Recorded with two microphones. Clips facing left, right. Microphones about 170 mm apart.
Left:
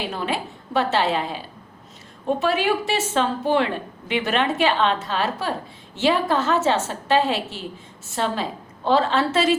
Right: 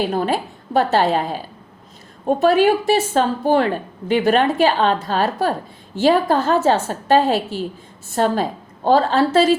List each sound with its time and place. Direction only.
0.0 s a woman's voice: 40° right (ahead or behind)